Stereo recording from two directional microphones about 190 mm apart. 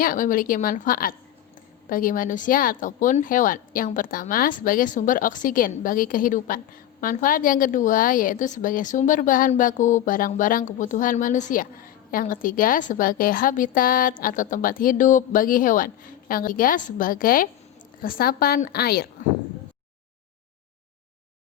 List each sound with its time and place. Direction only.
0.0 s a woman's voice: 45° left (ahead or behind)